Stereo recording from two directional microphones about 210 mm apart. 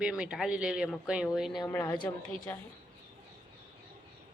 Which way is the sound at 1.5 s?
15° left (ahead or behind).